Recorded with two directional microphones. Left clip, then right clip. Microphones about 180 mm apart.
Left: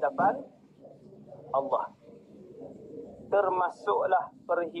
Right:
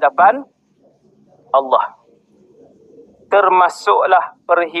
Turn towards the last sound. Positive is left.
turn(degrees=-50)  # may be behind; listen again after turning